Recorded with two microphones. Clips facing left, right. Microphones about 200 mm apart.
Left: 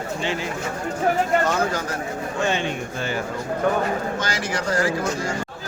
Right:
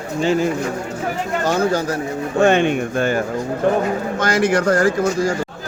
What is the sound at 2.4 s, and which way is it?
Speech, 60° right (ahead or behind).